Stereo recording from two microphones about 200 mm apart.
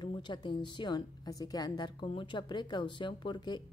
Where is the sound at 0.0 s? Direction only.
25° left (ahead or behind).